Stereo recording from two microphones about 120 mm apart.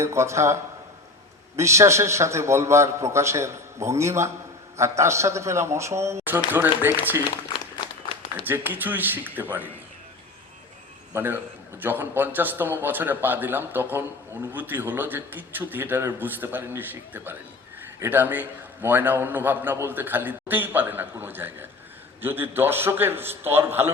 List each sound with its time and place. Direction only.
0.0 s a man's voice: 25° right (ahead or behind)
8.4 s a man's voice: 15° right (ahead or behind)
11.1 s a man's voice: 15° right (ahead or behind)